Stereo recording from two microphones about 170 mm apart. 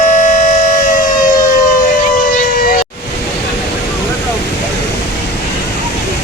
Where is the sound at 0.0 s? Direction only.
45° left (ahead or behind).